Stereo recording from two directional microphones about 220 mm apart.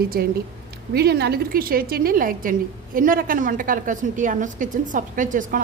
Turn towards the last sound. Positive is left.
turn(degrees=-35)  # may be behind; listen again after turning